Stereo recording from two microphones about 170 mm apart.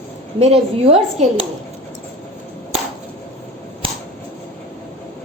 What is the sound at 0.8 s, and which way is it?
Speech, 35° right (ahead or behind).